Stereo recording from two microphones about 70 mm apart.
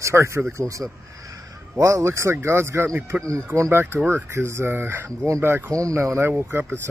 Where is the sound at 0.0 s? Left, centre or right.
Right.